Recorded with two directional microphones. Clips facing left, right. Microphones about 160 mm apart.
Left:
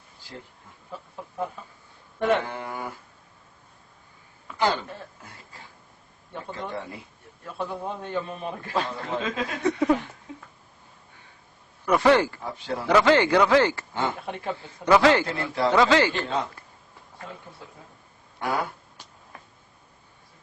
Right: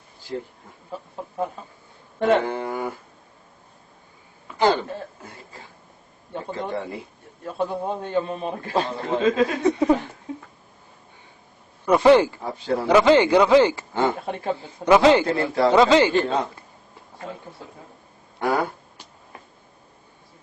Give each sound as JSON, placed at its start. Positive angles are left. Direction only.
{"t": 0.9, "sound": "a man's voice", "side_deg": -30}
{"t": 4.5, "sound": "a sound", "side_deg": -30}
{"t": 6.3, "sound": "a man's voice", "side_deg": -30}
{"t": 11.9, "sound": "a man's voice", "side_deg": -20}
{"t": 12.4, "sound": "speech", "side_deg": -35}
{"t": 12.9, "sound": "speech", "side_deg": -20}
{"t": 13.9, "sound": "speech", "side_deg": -35}
{"t": 14.8, "sound": "a man's voice", "side_deg": -20}
{"t": 15.4, "sound": "speech", "side_deg": -40}
{"t": 15.7, "sound": "a man's voice", "side_deg": -20}
{"t": 18.3, "sound": "speech", "side_deg": -35}